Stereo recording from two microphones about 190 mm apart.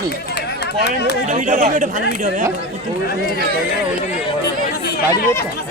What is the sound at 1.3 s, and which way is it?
Speech, 40° right (ahead or behind).